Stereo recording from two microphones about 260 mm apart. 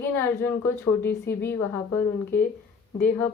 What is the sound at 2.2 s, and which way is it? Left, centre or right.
Speech, left.